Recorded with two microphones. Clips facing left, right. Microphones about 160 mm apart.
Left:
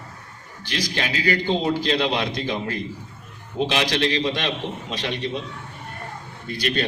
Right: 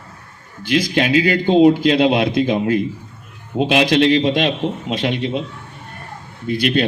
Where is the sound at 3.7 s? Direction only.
55° right (ahead or behind).